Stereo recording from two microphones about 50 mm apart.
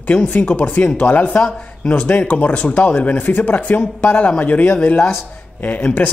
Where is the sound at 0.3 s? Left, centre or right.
Left.